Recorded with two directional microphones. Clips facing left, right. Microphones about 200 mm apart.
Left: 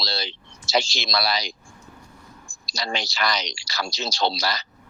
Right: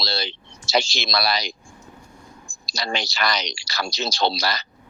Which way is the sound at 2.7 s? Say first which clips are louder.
Right 2 dB; 65° right (ahead or behind).